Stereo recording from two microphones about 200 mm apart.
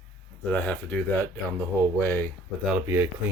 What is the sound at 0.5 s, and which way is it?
Speech, 10° left (ahead or behind).